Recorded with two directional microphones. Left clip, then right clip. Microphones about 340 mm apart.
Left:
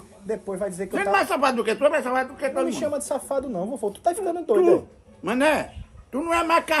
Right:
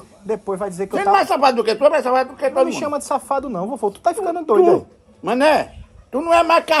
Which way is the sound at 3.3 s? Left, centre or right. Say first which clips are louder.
Right 5 dB; right.